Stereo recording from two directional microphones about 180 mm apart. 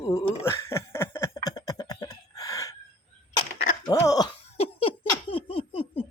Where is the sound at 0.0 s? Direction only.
20° left (ahead or behind).